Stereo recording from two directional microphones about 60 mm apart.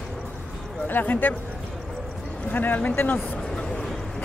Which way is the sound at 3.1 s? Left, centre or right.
Left.